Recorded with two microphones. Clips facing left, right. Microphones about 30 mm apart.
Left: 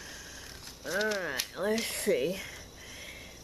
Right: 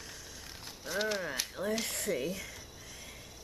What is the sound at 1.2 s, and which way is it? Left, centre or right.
Speech, centre.